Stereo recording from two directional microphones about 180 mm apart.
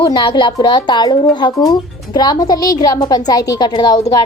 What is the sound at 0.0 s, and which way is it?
Speech, 25° left (ahead or behind).